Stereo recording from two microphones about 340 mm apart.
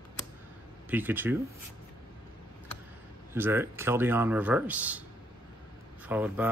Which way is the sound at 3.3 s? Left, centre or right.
Centre.